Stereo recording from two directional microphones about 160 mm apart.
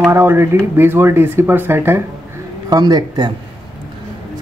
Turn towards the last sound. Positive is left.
turn(degrees=-25)  # may be behind; listen again after turning